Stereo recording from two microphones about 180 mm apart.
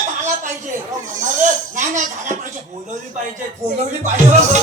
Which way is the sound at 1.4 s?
45° right (ahead or behind).